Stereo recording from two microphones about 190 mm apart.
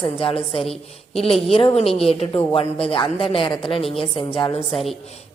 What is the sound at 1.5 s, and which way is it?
A woman's voice, 30° left (ahead or behind).